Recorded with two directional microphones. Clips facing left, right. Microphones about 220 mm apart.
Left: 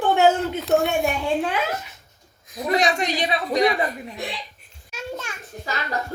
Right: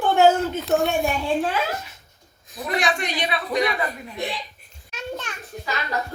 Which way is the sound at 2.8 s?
40° left (ahead or behind).